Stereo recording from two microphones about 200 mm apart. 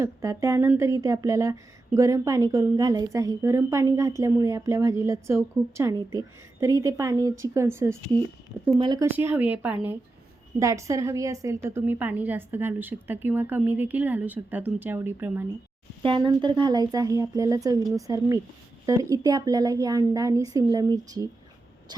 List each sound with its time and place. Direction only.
0.0 s a woman's voice: 15° right (ahead or behind)
9.1 s a woman's voice: 10° right (ahead or behind)
16.0 s a woman's voice: 25° right (ahead or behind)